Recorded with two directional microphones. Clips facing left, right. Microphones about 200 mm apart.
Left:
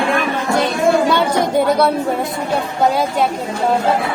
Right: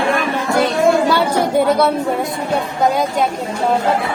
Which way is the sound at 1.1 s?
5° right (ahead or behind).